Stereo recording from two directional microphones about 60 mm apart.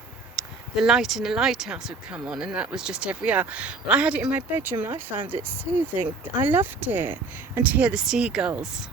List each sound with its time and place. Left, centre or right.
0.3 s speech: centre
2.0 s speech: centre
4.4 s speech: right
7.9 s speech: centre